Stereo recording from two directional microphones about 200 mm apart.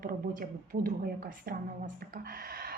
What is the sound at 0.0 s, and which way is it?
A woman's voice, 45° right (ahead or behind).